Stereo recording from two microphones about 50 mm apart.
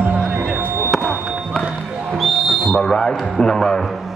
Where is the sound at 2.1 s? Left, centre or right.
Centre.